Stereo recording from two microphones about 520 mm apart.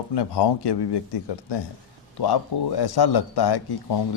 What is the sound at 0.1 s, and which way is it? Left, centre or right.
Speech, left.